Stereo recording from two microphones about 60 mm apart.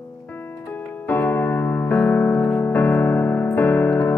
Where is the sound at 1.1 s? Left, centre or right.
Left.